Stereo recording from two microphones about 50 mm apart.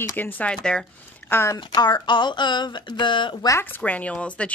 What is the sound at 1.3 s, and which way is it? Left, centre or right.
Speech, left.